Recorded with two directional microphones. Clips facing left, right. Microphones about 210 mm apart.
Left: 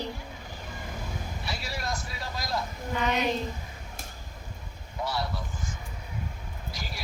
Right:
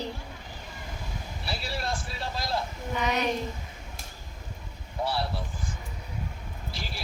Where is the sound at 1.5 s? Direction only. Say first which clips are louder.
Right 2 dB; 30° right (ahead or behind).